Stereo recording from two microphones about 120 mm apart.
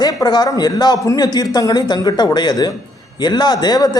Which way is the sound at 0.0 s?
35° left (ahead or behind).